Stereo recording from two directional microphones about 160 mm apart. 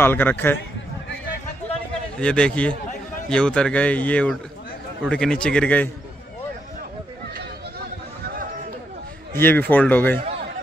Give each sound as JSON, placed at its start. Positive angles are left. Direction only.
{"t": 0.0, "sound": "speech", "side_deg": 15}
{"t": 2.1, "sound": "a man's voice", "side_deg": 5}
{"t": 9.4, "sound": "speech", "side_deg": 15}